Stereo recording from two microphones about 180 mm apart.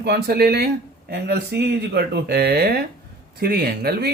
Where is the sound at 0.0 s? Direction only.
60° right (ahead or behind).